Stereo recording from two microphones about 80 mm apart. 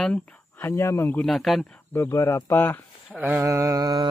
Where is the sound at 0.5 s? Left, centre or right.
Left.